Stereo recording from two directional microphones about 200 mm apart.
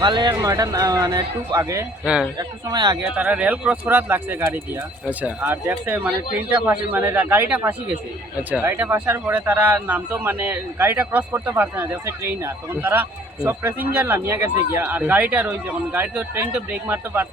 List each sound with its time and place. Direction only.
0.0 s speech: 25° right (ahead or behind)
3.2 s speech: 5° right (ahead or behind)